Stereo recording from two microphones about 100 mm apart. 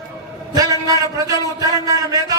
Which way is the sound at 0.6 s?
35° right (ahead or behind).